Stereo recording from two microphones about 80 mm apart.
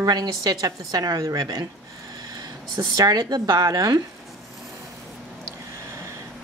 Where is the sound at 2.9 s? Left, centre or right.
Right.